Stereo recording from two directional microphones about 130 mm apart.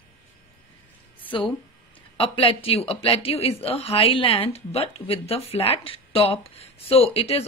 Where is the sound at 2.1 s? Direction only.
45° left (ahead or behind).